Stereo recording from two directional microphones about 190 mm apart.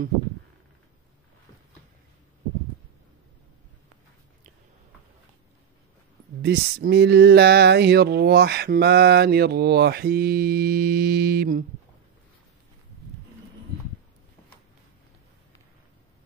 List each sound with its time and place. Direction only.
6.4 s speech: 55° right (ahead or behind)